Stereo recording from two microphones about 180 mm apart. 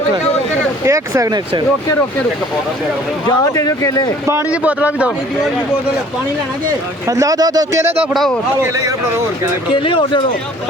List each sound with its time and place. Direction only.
0.9 s a man's voice: 15° right (ahead or behind)
3.2 s speech: 20° left (ahead or behind)
4.3 s a man's voice: 10° right (ahead or behind)
7.1 s speech: 20° right (ahead or behind)
8.1 s speech: centre (ahead or behind)
9.8 s speech: 25° left (ahead or behind)